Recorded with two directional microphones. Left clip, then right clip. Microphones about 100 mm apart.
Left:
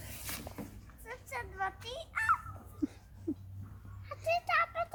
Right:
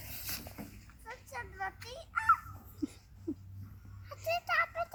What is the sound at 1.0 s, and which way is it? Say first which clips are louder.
Children playing: left 2 dB; 45° left (ahead or behind).